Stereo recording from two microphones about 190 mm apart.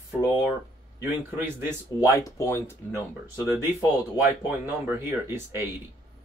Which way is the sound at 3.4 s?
5° right (ahead or behind).